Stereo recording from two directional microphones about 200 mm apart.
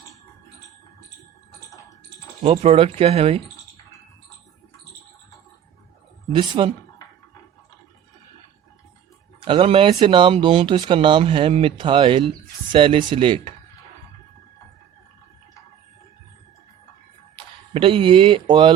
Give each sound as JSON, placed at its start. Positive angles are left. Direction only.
{"t": 2.4, "sound": "speech", "side_deg": -30}
{"t": 6.3, "sound": "speech", "side_deg": -25}
{"t": 9.4, "sound": "speech", "side_deg": -25}
{"t": 17.7, "sound": "speech", "side_deg": -25}